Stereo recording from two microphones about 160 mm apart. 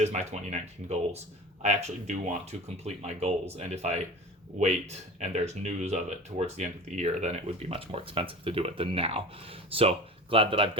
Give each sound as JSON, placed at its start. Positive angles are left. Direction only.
{"t": 0.0, "sound": "speech", "side_deg": -45}